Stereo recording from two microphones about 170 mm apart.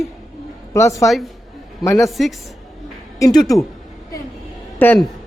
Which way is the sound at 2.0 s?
Centre (ahead or behind).